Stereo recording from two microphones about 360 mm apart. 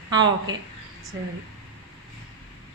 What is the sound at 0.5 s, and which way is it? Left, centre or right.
Speech, centre.